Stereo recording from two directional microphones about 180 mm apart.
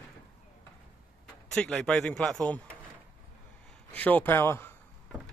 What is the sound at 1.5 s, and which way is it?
Speech, 5° left (ahead or behind).